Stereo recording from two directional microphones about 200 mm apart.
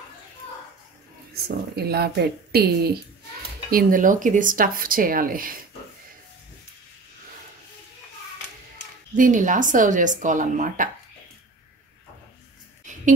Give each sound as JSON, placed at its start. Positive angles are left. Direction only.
{"t": 1.3, "sound": "speech", "side_deg": -50}
{"t": 3.7, "sound": "speech", "side_deg": -40}
{"t": 9.1, "sound": "speech", "side_deg": -40}